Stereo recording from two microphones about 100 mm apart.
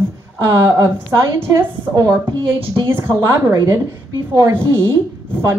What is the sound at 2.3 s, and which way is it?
Speech, 55° right (ahead or behind).